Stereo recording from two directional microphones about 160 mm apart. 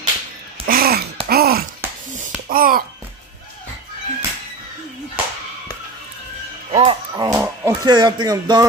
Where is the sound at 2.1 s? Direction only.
65° right (ahead or behind).